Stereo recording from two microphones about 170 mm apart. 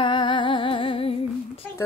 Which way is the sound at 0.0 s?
30° left (ahead or behind).